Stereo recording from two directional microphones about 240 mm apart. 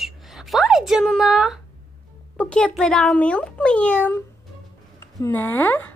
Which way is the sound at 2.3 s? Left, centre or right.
Centre.